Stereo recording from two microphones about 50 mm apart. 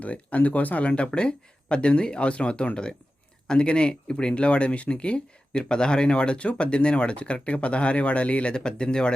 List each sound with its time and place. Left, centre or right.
0.0 s speech: left